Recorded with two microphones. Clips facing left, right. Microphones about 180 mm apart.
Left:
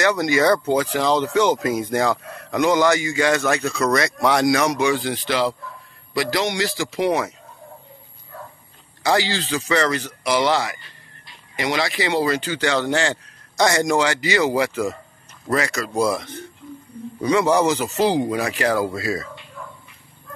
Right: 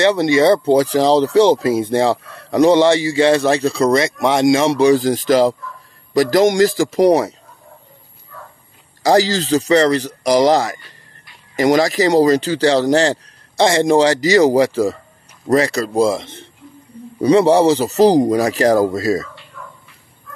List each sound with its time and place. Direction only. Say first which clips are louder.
0.0 s a man's voice: right 5 dB; 30° right (ahead or behind)
9.0 s a man's voice: right 7 dB; 40° right (ahead or behind)